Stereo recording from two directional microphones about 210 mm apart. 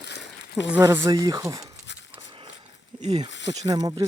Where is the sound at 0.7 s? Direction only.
10° right (ahead or behind).